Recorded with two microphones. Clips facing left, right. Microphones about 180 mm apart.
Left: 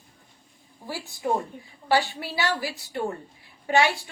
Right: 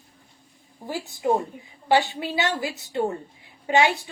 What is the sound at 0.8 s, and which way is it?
A woman's voice, 20° right (ahead or behind).